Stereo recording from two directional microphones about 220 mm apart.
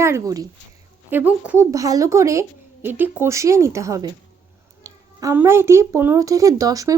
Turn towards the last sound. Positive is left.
turn(degrees=-15)  # may be behind; listen again after turning